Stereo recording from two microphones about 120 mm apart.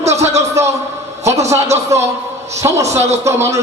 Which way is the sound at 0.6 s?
25° right (ahead or behind).